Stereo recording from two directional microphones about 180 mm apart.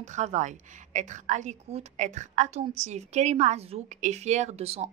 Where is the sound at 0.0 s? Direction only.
40° right (ahead or behind).